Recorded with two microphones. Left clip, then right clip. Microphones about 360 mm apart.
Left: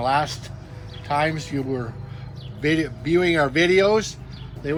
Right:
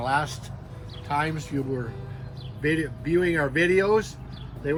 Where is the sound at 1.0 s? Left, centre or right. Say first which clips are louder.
Left 5 dB; centre.